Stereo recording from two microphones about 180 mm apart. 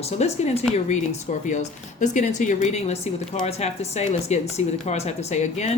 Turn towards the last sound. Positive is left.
turn(degrees=40)  # may be behind; listen again after turning